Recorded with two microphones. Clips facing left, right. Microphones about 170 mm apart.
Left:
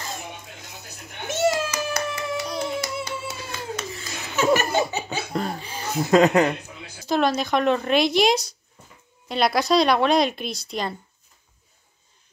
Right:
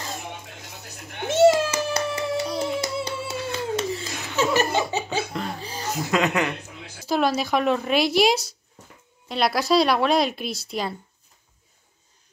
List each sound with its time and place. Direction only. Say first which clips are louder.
1.2 s a sound: right 6 dB; 30° right (ahead or behind)
5.3 s laughter: left 3 dB; 40° left (ahead or behind)
5.6 s chuckle: right 1 dB; 35° right (ahead or behind)
6.1 s speech: left 7 dB; 35° left (ahead or behind)
7.1 s speech: left 1 dB; 5° right (ahead or behind)